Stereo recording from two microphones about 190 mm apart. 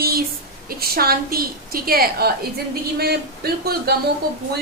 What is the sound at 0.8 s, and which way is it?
A woman's voice, 55° right (ahead or behind).